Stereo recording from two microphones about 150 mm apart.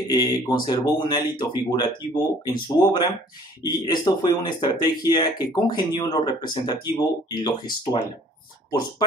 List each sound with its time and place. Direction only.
0.1 s speech: 30° left (ahead or behind)